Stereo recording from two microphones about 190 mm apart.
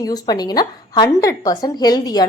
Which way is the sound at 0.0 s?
20° left (ahead or behind).